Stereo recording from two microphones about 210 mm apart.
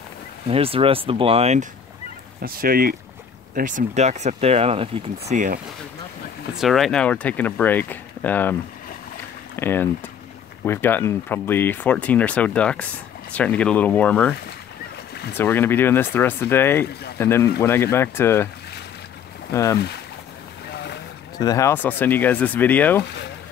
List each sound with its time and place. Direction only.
0.5 s speech: 25° right (ahead or behind)
2.4 s speech: 45° right (ahead or behind)
6.6 s speech: centre (ahead or behind)
9.6 s speech: 10° left (ahead or behind)
15.3 s speech: 10° left (ahead or behind)
19.5 s speech: 15° left (ahead or behind)
21.4 s speech: 15° left (ahead or behind)